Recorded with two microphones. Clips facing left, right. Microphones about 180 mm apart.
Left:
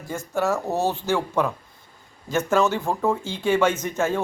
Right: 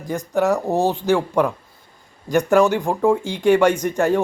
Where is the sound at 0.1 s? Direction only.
15° right (ahead or behind).